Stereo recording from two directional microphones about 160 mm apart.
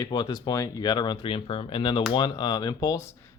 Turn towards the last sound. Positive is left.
turn(degrees=20)  # may be behind; listen again after turning